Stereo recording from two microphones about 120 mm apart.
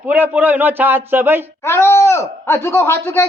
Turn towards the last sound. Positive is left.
turn(degrees=20)  # may be behind; listen again after turning